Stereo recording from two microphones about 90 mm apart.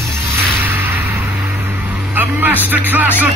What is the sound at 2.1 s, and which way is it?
Vehicle, 20° right (ahead or behind).